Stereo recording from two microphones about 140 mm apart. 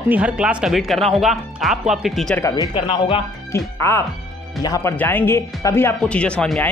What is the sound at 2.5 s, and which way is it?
Speech, 35° left (ahead or behind).